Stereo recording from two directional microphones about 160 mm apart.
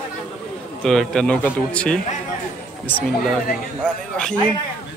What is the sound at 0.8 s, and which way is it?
A man's voice, 5° left (ahead or behind).